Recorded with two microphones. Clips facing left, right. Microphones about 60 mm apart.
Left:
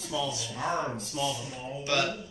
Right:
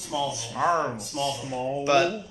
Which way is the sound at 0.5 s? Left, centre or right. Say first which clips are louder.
Right 8 dB; right.